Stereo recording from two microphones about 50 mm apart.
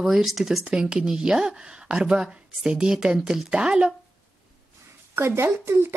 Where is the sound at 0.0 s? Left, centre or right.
Centre.